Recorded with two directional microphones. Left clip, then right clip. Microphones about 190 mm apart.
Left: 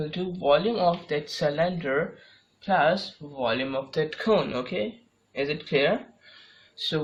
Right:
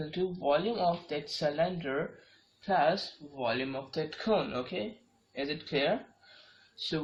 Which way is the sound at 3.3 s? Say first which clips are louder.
Left 6 dB; 45° left (ahead or behind).